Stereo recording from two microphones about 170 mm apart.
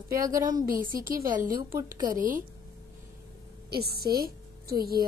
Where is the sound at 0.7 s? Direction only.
55° right (ahead or behind).